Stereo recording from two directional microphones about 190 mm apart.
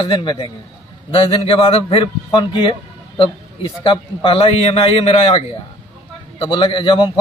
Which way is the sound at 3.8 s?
30° left (ahead or behind).